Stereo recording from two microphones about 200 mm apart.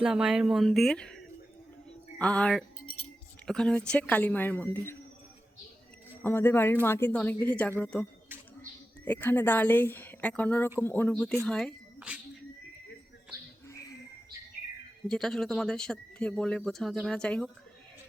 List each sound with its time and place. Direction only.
0.0 s speech: 5° right (ahead or behind)
2.1 s a woman's voice: 5° left (ahead or behind)
6.2 s a woman's voice: 10° left (ahead or behind)
9.0 s a woman's voice: 10° left (ahead or behind)
11.4 s whispering: 5° left (ahead or behind)
13.7 s a sound: 15° left (ahead or behind)
15.0 s speech: centre (ahead or behind)